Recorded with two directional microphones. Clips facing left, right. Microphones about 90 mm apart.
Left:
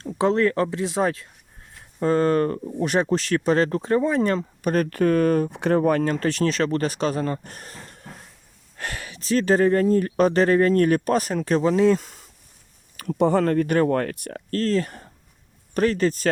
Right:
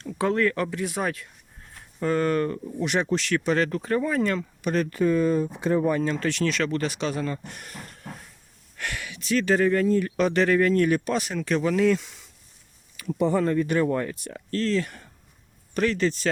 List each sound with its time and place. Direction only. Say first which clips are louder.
0.0 s speech: left 3 dB; 25° left (ahead or behind); by 6.1 s 65° left (ahead or behind)
6.1 s speech: left 3 dB; 40° left (ahead or behind)
11.9 s speech: left 3 dB; 45° left (ahead or behind)
13.1 s speech: left 3 dB; 65° left (ahead or behind); by 16.3 s 45° left (ahead or behind)